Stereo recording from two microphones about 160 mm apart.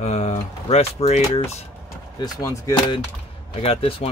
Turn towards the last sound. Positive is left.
turn(degrees=35)  # may be behind; listen again after turning